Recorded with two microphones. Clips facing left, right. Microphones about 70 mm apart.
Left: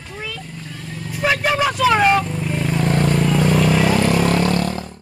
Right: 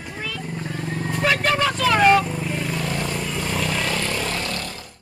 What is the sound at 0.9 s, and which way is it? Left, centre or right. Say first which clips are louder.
Vehicle: right 3 dB; right.